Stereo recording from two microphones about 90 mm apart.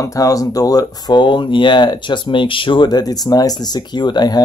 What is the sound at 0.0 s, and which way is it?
Speech, 40° left (ahead or behind).